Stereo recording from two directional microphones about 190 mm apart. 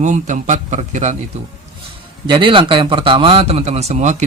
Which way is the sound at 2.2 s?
25° right (ahead or behind).